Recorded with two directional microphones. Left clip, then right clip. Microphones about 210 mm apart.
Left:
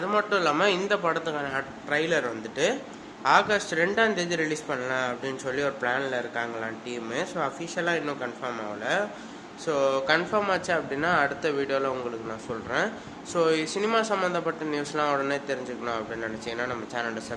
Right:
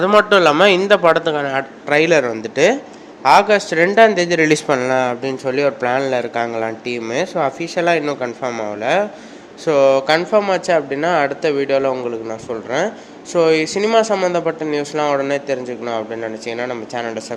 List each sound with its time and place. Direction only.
0.0 s speech: 35° right (ahead or behind)